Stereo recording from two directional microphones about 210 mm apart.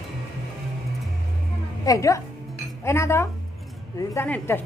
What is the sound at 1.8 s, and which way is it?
A woman's voice, 15° left (ahead or behind).